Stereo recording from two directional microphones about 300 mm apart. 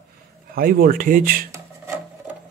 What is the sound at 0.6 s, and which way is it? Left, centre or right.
Speech, right.